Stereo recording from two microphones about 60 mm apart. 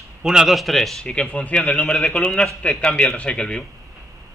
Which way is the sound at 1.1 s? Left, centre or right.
Centre.